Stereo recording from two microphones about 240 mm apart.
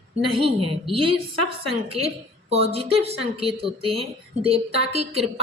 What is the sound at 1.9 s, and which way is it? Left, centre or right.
A woman's voice, right.